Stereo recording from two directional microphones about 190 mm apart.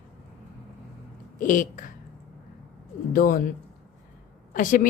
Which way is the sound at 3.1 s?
50° left (ahead or behind).